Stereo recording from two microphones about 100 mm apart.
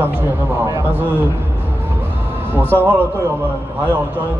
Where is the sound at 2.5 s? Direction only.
15° left (ahead or behind).